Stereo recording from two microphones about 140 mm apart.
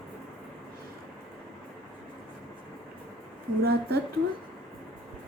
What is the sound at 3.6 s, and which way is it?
Speech, 90° right.